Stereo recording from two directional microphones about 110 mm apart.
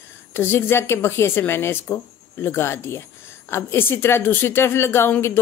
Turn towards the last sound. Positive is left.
turn(degrees=20)  # may be behind; listen again after turning